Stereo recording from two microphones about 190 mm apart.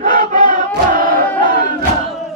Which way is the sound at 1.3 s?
25° left (ahead or behind).